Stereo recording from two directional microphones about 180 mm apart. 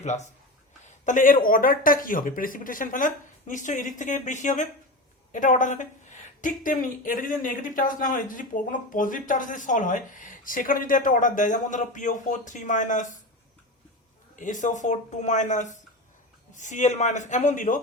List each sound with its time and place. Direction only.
0.0 s speech: 40° left (ahead or behind)
14.3 s speech: 45° left (ahead or behind)